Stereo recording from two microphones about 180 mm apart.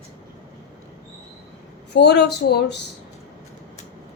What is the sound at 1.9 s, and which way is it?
Speech, 70° left (ahead or behind).